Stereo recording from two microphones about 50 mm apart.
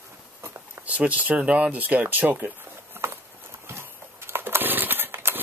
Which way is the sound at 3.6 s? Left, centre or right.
Right.